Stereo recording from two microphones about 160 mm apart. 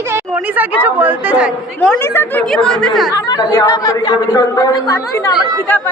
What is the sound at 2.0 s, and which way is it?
Speech, 15° left (ahead or behind).